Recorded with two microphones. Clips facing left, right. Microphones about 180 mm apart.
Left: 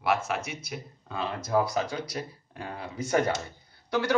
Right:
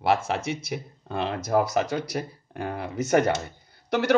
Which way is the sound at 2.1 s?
60° right (ahead or behind).